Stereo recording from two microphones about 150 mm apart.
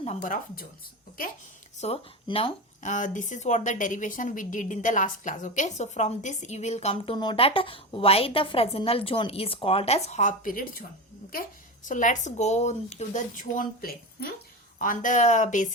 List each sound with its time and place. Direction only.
0.0 s speech: 50° left (ahead or behind)
1.8 s speech: 40° left (ahead or behind)
2.8 s a woman's voice: 55° left (ahead or behind)
11.9 s speech: 60° left (ahead or behind); by 14.3 s 75° left (ahead or behind)
14.8 s speech: 60° left (ahead or behind)